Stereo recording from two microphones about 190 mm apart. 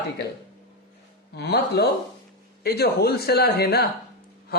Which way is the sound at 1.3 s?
60° left (ahead or behind).